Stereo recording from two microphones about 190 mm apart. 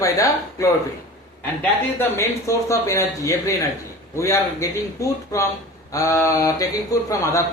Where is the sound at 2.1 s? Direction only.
15° left (ahead or behind).